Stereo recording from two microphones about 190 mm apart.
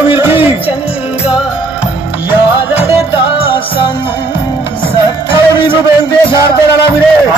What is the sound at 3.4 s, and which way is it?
Music, 25° left (ahead or behind).